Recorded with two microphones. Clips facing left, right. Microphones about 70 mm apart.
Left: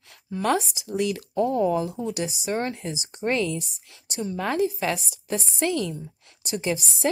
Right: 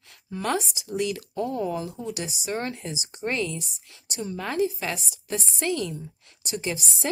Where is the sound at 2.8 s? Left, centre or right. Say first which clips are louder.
Left 2 dB; left.